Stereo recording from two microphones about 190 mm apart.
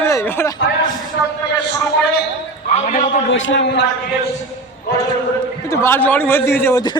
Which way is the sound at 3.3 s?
80° left.